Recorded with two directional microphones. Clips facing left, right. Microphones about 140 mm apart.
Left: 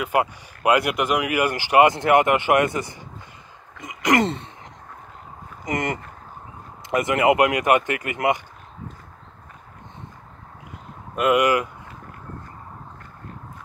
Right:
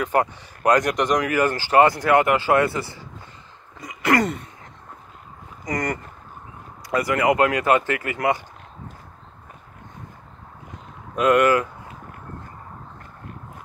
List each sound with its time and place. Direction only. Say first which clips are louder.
0.0 s speech: right 1 dB; 10° left (ahead or behind)
3.8 s throat clearing: even; 20° left (ahead or behind)
5.7 s speech: even; 25° left (ahead or behind)
11.1 s speech: right 2 dB; 10° left (ahead or behind)